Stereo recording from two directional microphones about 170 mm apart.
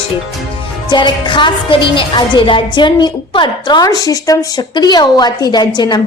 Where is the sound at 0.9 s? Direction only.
25° left (ahead or behind).